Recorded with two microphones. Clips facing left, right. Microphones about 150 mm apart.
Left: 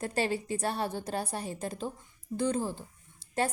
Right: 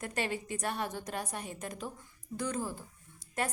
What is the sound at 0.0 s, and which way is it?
A woman's voice, 30° left (ahead or behind).